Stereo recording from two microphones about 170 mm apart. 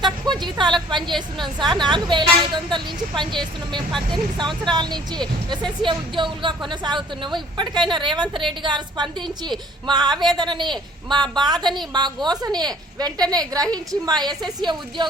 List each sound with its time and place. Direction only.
0.4 s a woman's voice: 25° right (ahead or behind)